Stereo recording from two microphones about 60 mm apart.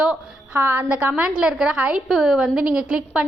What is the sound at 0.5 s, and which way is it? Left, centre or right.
Speech, right.